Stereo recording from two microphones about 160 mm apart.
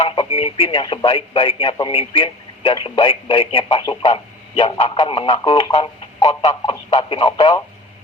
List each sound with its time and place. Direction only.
0.0 s speech: 35° left (ahead or behind)